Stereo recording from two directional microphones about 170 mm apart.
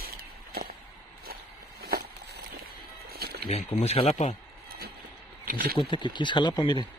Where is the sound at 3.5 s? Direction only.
35° left (ahead or behind).